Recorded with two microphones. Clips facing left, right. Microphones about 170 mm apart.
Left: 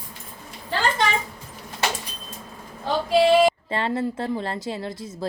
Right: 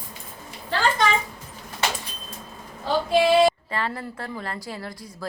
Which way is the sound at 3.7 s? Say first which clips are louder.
Left 5 dB; 25° left (ahead or behind).